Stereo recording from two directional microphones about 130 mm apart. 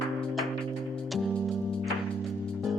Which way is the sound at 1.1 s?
5° left (ahead or behind).